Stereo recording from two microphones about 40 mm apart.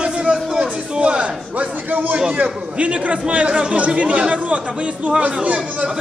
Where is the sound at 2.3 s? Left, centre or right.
Right.